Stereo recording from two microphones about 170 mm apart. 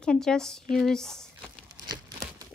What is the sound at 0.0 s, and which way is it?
Speech, 5° left (ahead or behind).